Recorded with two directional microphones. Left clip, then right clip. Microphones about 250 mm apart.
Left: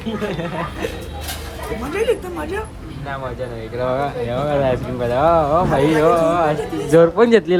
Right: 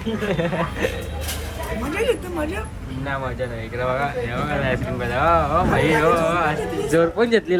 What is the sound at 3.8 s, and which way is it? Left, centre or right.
Speech, centre.